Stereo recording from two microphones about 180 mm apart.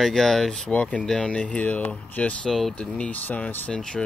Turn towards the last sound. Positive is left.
turn(degrees=5)  # may be behind; listen again after turning